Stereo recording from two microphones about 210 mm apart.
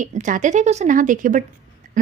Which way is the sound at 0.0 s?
35° right (ahead or behind).